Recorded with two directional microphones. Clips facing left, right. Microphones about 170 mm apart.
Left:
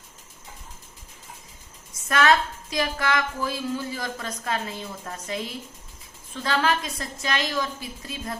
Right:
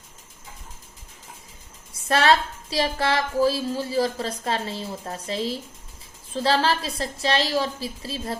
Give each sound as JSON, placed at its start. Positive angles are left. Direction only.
{"t": 1.9, "sound": "a woman's voice", "side_deg": -30}